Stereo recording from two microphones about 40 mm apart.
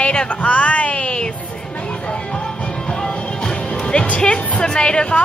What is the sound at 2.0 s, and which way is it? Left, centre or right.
Music, left.